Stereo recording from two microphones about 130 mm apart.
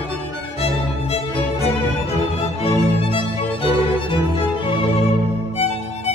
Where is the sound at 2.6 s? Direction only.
45° left (ahead or behind).